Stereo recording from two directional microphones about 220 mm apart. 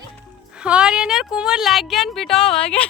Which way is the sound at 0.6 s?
5° right (ahead or behind).